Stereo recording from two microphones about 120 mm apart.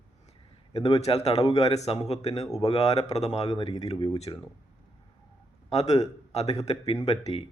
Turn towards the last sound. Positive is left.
turn(degrees=60)  # may be behind; listen again after turning